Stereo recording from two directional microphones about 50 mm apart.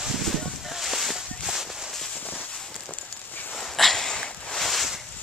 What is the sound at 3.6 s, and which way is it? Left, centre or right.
Dog, centre.